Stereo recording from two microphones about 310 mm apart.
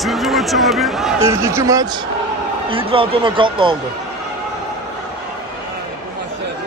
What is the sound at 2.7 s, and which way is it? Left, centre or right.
Speech, centre.